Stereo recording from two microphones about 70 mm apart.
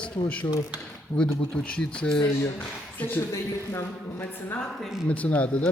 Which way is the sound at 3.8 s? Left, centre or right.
Left.